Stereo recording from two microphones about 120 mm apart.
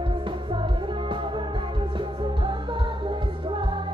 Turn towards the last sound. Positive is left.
turn(degrees=-45)  # may be behind; listen again after turning